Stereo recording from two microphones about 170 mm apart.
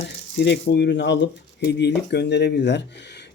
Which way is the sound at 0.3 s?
85° left.